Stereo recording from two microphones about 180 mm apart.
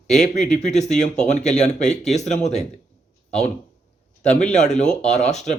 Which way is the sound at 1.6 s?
40° left (ahead or behind).